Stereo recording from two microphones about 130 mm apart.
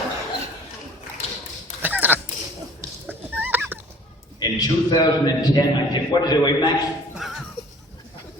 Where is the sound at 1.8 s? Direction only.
15° right (ahead or behind).